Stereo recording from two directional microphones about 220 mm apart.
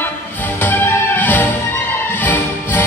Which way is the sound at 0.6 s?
10° left (ahead or behind).